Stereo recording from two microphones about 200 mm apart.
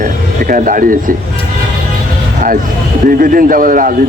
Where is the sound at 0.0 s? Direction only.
45° right (ahead or behind).